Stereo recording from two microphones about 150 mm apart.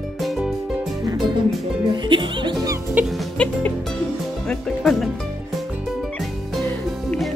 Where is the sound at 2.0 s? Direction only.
35° right (ahead or behind).